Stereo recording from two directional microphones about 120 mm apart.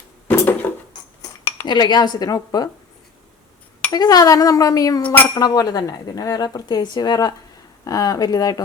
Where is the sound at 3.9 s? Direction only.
35° left (ahead or behind).